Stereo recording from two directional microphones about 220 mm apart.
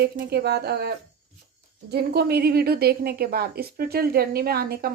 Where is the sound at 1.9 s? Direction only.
45° right (ahead or behind).